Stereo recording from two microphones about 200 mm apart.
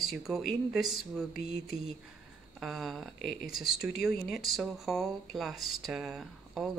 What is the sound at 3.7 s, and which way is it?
Speech, 50° left (ahead or behind).